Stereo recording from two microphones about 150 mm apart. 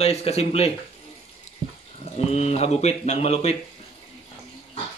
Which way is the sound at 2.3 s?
45° left (ahead or behind).